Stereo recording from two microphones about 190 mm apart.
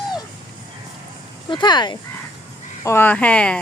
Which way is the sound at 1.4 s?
25° left (ahead or behind).